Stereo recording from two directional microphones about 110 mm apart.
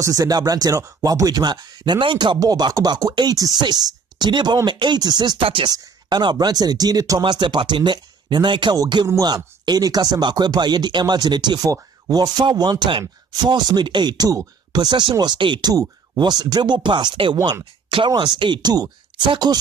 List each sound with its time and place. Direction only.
0.0 s speech: 30° right (ahead or behind)
2.4 s speech: 35° right (ahead or behind)